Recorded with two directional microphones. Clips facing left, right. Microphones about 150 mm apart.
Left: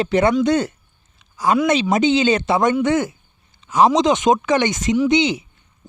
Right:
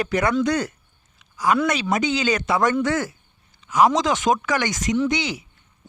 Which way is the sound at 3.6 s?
25° left (ahead or behind).